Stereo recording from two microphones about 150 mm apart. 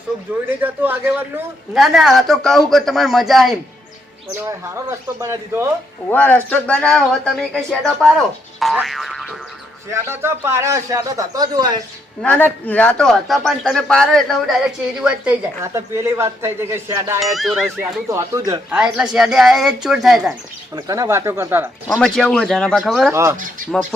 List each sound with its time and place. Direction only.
0.6 s speech: 10° right (ahead or behind)
1.7 s a man's voice: centre (ahead or behind)
4.4 s speech: 15° right (ahead or behind)
6.1 s speech: 10° left (ahead or behind)
8.5 s boing: centre (ahead or behind)
9.9 s a man's voice: 15° right (ahead or behind)
12.2 s a man's voice: 10° left (ahead or behind); by 15.4 s 5° right (ahead or behind)
15.6 s speech: 20° right (ahead or behind)
17.3 s a man's voice: centre (ahead or behind)
18.1 s a man's voice: 20° right (ahead or behind)
18.7 s a man's voice: 5° right (ahead or behind)
20.7 s a man's voice: 25° right (ahead or behind)
21.8 s a man's voice: centre (ahead or behind)
23.1 s speech: 20° right (ahead or behind)